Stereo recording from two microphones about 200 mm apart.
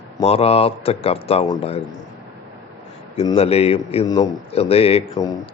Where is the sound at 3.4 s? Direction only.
30° left (ahead or behind).